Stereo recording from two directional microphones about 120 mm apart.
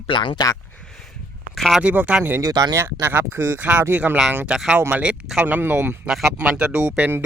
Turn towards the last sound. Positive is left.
turn(degrees=-15)  # may be behind; listen again after turning